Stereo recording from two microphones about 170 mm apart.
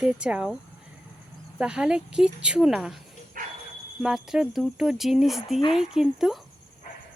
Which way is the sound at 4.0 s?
5° right (ahead or behind).